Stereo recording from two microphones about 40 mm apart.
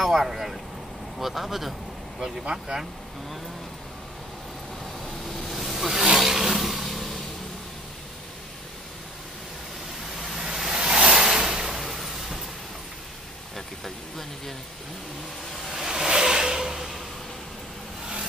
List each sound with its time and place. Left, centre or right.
0.0 s speech: centre
5.0 s vehicle: centre
5.9 s vehicle: centre
10.1 s vehicle: centre
10.4 s a sound: centre
10.7 s vehicle: right
11.1 s a sound: centre
13.6 s vehicle: centre
15.7 s a sound: centre